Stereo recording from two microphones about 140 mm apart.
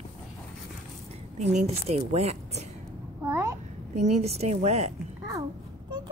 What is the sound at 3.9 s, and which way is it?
Speech, 55° right (ahead or behind).